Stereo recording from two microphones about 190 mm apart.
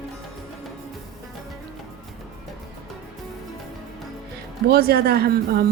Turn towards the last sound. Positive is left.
turn(degrees=-55)  # may be behind; listen again after turning